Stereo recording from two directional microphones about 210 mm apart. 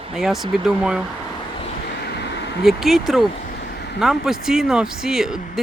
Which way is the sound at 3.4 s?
50° left (ahead or behind).